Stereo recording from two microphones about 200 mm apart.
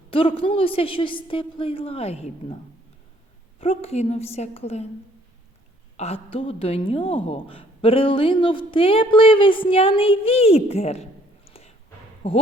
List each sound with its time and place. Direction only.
0.1 s a woman's voice: 25° left (ahead or behind)
3.6 s a woman's voice: 30° left (ahead or behind)
6.0 s a woman's voice: 30° left (ahead or behind)